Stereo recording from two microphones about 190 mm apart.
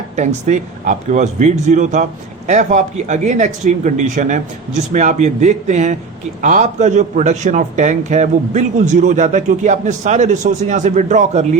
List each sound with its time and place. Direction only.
0.2 s a man's voice: 40° right (ahead or behind)